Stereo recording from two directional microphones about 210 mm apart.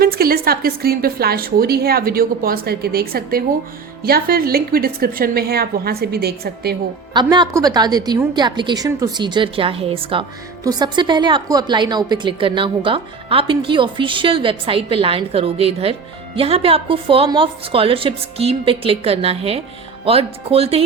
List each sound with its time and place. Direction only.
0.0 s a woman's voice: 45° right (ahead or behind)
7.1 s a woman's voice: 20° right (ahead or behind)